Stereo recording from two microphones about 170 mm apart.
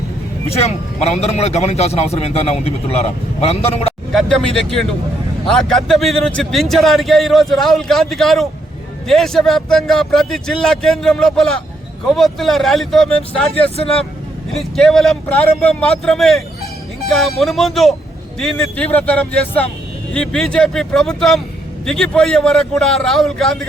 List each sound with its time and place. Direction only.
0.4 s a man's voice: 35° left (ahead or behind)
4.1 s a man's voice: centre (ahead or behind)
13.6 s a man's voice: 35° left (ahead or behind)
14.6 s a man's voice: centre (ahead or behind)